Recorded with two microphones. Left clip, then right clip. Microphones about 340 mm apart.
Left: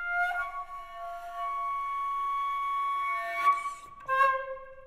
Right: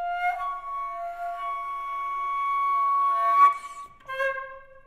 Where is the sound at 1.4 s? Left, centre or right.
Centre.